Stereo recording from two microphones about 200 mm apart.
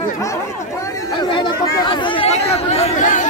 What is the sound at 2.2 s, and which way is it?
Chatter, 30° left (ahead or behind).